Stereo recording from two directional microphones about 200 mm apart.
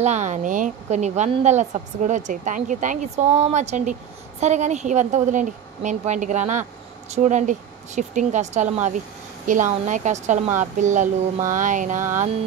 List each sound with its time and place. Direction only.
0.0 s a woman's voice: 35° right (ahead or behind)